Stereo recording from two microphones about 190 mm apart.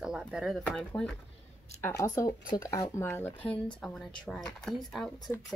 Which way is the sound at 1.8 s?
15° left (ahead or behind).